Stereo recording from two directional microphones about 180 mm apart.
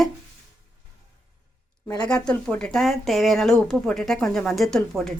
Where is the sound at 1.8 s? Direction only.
25° left (ahead or behind).